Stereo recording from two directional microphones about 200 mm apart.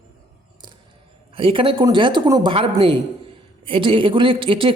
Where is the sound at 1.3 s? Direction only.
25° right (ahead or behind).